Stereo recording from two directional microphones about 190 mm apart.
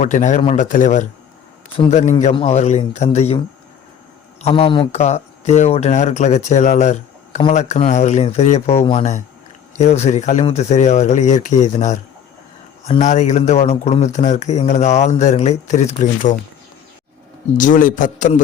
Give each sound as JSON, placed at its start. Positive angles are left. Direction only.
{"t": 0.0, "sound": "speech", "side_deg": 40}
{"t": 4.4, "sound": "speech", "side_deg": 30}
{"t": 17.6, "sound": "a man's voice", "side_deg": 45}